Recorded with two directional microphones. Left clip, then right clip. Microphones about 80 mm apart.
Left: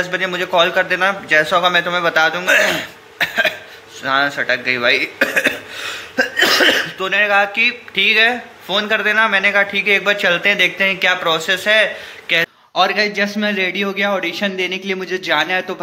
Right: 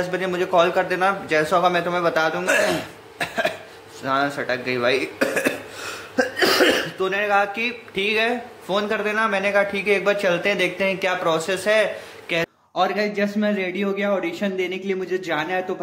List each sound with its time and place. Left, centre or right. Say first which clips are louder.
0.1 s a man's voice: left 3 dB; centre
4.5 s a sound: left 6 dB; right
6.3 s speech: left 5 dB; centre